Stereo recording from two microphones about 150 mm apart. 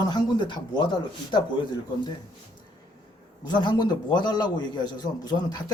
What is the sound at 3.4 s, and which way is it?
A man's voice, 30° left (ahead or behind).